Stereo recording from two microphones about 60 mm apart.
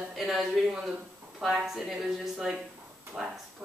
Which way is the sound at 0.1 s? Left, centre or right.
Centre.